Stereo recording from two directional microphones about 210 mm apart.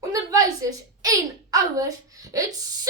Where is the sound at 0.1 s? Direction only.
15° right (ahead or behind).